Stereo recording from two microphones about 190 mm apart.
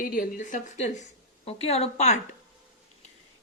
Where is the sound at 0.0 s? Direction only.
50° left (ahead or behind).